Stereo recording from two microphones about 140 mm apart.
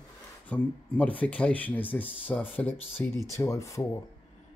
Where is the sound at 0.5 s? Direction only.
10° left (ahead or behind).